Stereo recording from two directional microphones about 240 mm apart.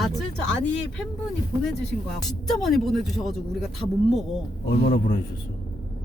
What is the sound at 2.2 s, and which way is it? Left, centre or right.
Speech, centre.